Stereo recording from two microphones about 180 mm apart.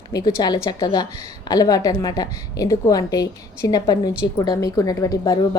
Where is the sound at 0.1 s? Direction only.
20° left (ahead or behind).